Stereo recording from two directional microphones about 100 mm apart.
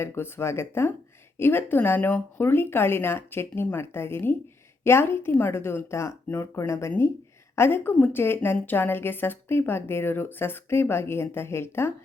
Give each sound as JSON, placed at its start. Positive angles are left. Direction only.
{"t": 0.0, "sound": "a woman's voice", "side_deg": 25}